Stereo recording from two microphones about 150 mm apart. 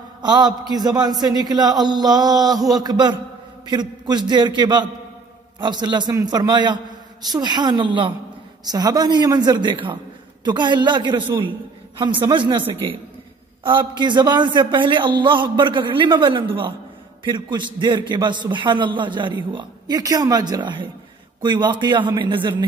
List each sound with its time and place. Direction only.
0.2 s a man's voice: 30° right (ahead or behind)